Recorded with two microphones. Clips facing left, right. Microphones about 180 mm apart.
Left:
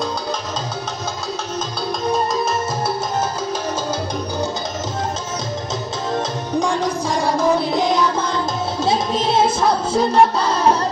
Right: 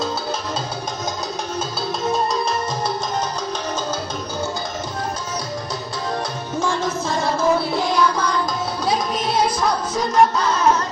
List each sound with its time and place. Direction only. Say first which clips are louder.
6.6 s music: left 1 dB; 15° left (ahead or behind); by 10.9 s 30° left (ahead or behind)